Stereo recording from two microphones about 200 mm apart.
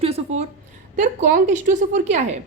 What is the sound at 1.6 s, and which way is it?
Speech, 35° right (ahead or behind).